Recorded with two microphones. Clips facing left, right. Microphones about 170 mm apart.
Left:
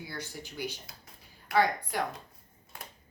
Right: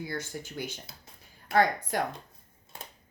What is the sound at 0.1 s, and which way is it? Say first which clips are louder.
Speech: right 5 dB; 45° right (ahead or behind).